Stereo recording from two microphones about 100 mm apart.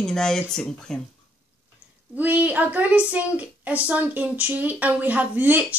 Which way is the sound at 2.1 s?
15° right (ahead or behind).